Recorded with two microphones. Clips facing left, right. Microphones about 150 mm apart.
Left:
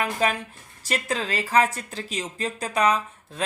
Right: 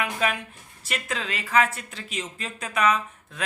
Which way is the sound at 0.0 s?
35° left (ahead or behind).